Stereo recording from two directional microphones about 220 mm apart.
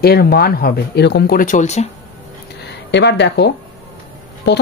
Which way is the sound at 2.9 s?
50° left (ahead or behind).